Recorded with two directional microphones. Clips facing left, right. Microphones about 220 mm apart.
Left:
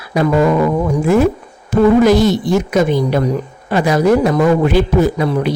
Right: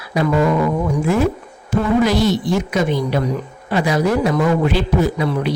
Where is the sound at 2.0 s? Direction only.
45° left (ahead or behind).